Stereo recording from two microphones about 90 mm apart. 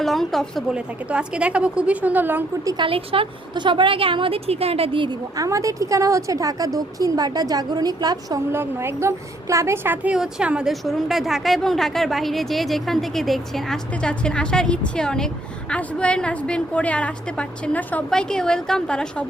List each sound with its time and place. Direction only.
0.0 s a woman's voice: centre (ahead or behind)
0.7 s a woman's voice: 10° right (ahead or behind)
2.7 s speech: 80° right
3.5 s a woman's voice: 60° right (ahead or behind)
5.4 s a woman's voice: 35° right (ahead or behind)
8.5 s a woman's voice: 30° right (ahead or behind)
10.2 s a woman's voice: 10° right (ahead or behind); by 19.2 s 10° left (ahead or behind)